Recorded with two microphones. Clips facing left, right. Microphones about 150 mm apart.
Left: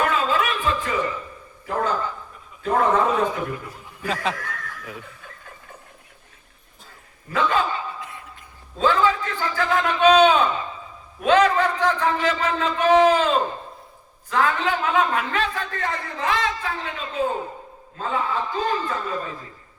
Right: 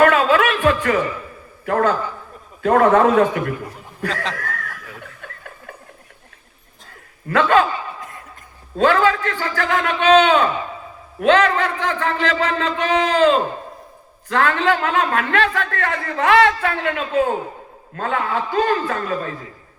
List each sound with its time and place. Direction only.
0.0 s music: 70° right (ahead or behind)
1.6 s a man's voice: 65° right (ahead or behind)
4.1 s speech: 10° left (ahead or behind)
5.2 s a sound: 65° right (ahead or behind)
7.3 s a man's voice: 70° right (ahead or behind)
8.8 s a man's voice: 70° right (ahead or behind)